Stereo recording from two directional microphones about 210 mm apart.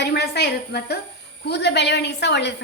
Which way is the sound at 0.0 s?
50° left (ahead or behind).